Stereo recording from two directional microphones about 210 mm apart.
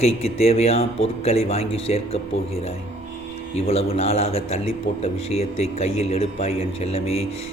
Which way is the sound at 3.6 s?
30° left (ahead or behind).